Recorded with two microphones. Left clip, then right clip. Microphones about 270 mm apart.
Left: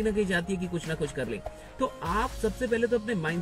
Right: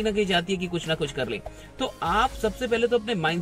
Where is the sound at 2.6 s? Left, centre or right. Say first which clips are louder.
Right 4 dB; centre.